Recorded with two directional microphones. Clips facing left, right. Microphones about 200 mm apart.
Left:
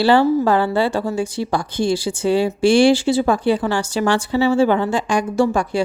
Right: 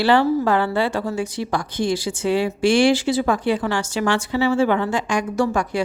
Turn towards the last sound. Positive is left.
turn(degrees=30)  # may be behind; listen again after turning